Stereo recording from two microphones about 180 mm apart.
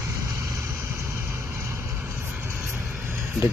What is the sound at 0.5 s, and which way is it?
Vehicle, 15° right (ahead or behind).